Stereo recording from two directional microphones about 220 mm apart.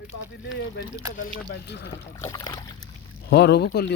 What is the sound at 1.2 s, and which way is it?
Speech, 50° left (ahead or behind).